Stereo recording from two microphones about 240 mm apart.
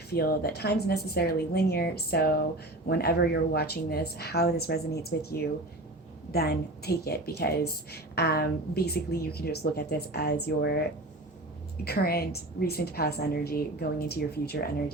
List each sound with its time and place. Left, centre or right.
0.1 s a woman's voice: left
11.9 s a woman's voice: left